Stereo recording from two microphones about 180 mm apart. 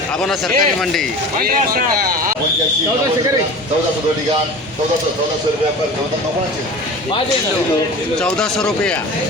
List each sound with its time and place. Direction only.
0.2 s speech: centre (ahead or behind)
1.4 s speech: 55° right (ahead or behind)
8.2 s speech: 5° left (ahead or behind)